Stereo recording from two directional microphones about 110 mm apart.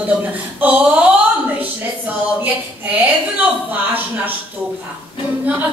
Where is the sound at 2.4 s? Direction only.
15° right (ahead or behind).